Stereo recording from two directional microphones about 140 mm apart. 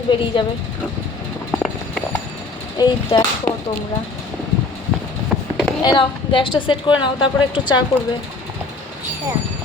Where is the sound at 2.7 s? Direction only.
30° left (ahead or behind).